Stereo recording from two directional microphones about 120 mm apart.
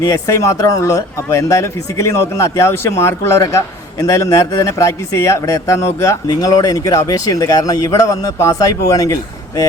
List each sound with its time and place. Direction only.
0.0 s a man's voice: 30° left (ahead or behind)